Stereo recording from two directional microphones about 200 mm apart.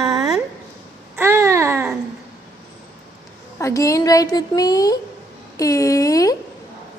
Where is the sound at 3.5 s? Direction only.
15° left (ahead or behind).